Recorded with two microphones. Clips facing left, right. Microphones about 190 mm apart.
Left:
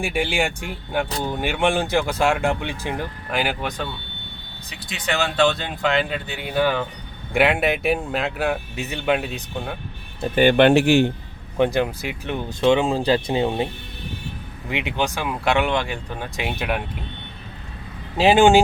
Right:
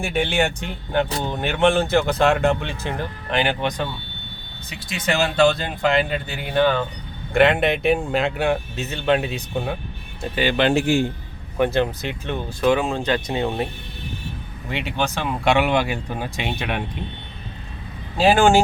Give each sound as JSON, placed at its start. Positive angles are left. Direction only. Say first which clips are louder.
{"t": 0.0, "sound": "speech", "louder": "right 1 dB", "side_deg": 10}
{"t": 8.7, "sound": "speech", "louder": "right 2 dB", "side_deg": 15}
{"t": 10.3, "sound": "a man's voice", "louder": "left 5 dB", "side_deg": 55}
{"t": 11.6, "sound": "speech", "louder": "even", "side_deg": 15}
{"t": 12.5, "sound": "speech", "louder": "left 2 dB", "side_deg": 25}
{"t": 14.7, "sound": "speech", "louder": "left 1 dB", "side_deg": 15}
{"t": 18.2, "sound": "speech", "louder": "left 1 dB", "side_deg": 20}